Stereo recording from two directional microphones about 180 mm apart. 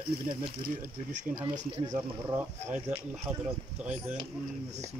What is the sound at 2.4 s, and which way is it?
Speech, 5° right (ahead or behind).